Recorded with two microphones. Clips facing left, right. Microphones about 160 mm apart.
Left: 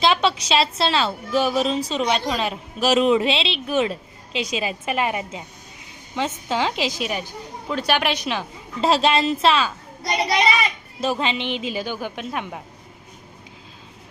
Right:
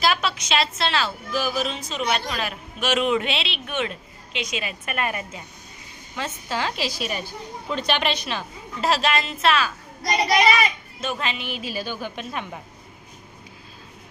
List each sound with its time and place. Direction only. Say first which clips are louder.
0.0 s a woman's voice: left 4 dB; 25° left (ahead or behind)
8.8 s a woman's voice: left 4 dB; 30° left (ahead or behind)
11.0 s a woman's voice: left 5 dB; 30° left (ahead or behind); by 12.5 s 10° left (ahead or behind)